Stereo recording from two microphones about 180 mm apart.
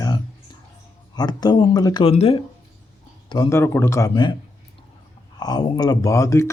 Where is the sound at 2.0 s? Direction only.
30° left (ahead or behind).